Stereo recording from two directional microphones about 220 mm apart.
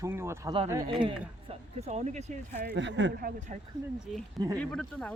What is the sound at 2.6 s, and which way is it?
Speech, 55° right (ahead or behind).